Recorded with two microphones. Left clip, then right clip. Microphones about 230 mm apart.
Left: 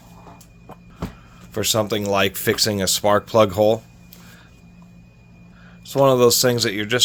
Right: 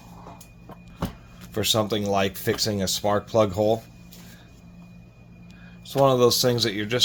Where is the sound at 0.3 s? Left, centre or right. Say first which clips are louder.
Left 4 dB; centre.